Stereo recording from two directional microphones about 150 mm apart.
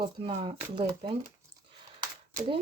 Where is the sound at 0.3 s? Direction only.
35° right (ahead or behind).